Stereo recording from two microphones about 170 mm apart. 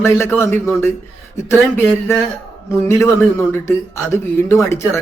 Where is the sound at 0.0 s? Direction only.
15° left (ahead or behind).